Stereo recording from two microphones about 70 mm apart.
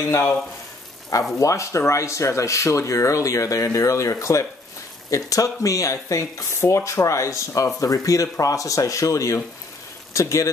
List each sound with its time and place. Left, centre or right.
1.4 s speech: left